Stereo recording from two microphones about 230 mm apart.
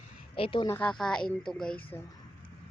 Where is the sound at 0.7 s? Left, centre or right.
Centre.